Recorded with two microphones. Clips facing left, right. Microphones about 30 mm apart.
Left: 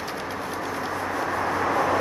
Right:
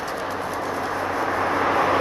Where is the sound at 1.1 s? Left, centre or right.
Right.